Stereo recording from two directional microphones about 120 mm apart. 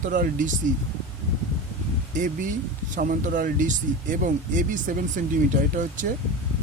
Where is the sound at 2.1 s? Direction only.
90° right.